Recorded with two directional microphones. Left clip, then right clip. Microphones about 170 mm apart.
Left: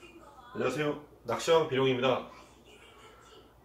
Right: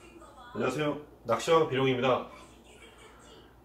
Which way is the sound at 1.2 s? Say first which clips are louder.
Right 1 dB; 15° left (ahead or behind).